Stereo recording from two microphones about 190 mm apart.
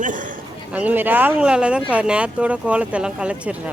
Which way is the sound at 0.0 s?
45° right (ahead or behind).